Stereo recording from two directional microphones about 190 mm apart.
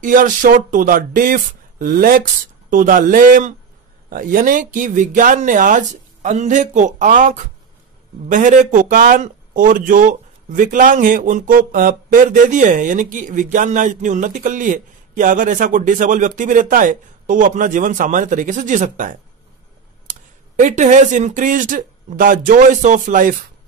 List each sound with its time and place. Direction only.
0.0 s speech: 45° right (ahead or behind)